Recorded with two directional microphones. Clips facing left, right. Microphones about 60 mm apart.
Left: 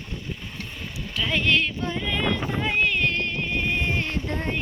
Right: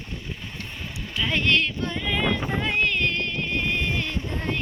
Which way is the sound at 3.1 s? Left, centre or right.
Left.